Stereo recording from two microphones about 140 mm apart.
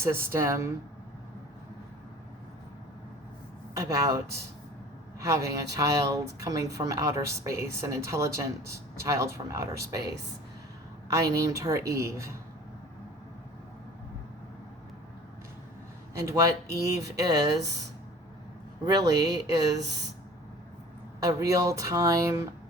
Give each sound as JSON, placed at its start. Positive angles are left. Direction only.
{"t": 0.0, "sound": "speech", "side_deg": -20}
{"t": 3.8, "sound": "speech", "side_deg": -25}
{"t": 16.1, "sound": "speech", "side_deg": -20}
{"t": 18.9, "sound": "speech", "side_deg": -25}
{"t": 21.2, "sound": "speech", "side_deg": -25}